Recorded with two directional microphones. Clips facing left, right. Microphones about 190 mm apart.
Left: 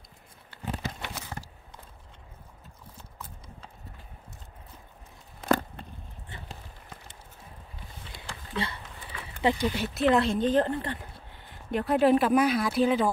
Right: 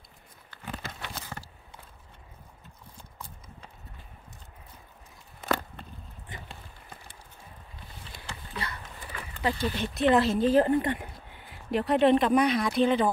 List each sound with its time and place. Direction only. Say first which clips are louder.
0.7 s horse: left 4 dB; 10° left (ahead or behind)
8.1 s a sound: left 3 dB; 25° left (ahead or behind)
9.9 s speech: right 1 dB; centre (ahead or behind)